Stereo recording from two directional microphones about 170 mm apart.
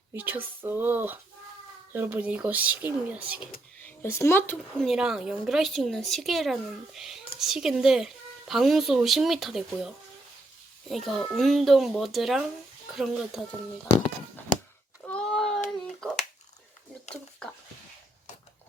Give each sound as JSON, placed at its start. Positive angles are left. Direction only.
{"t": 0.1, "sound": "speech", "side_deg": -10}
{"t": 3.8, "sound": "speech", "side_deg": 15}
{"t": 4.8, "sound": "speech", "side_deg": 0}
{"t": 15.0, "sound": "a sound", "side_deg": 5}